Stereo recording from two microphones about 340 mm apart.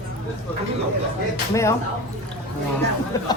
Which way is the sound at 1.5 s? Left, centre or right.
Centre.